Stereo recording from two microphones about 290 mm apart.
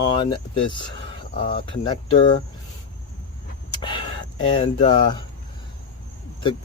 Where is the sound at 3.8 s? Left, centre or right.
Centre.